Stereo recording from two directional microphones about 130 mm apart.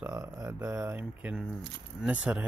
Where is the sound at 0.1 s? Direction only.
30° right (ahead or behind).